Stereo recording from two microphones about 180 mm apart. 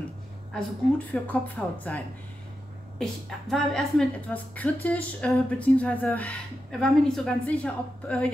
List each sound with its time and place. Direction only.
0.5 s a woman's voice: 10° left (ahead or behind)